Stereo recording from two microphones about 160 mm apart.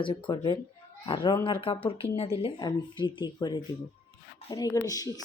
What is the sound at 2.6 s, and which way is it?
Speech, 30° left (ahead or behind).